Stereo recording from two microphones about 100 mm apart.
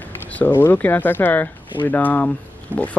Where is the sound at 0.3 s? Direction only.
15° left (ahead or behind).